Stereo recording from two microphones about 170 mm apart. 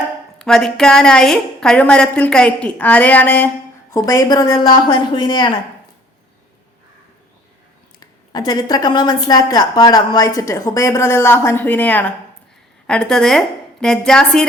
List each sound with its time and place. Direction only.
0.3 s a woman's voice: 5° left (ahead or behind); by 5.5 s 25° left (ahead or behind)
7.9 s a woman's voice: 25° left (ahead or behind); by 14.4 s 5° left (ahead or behind)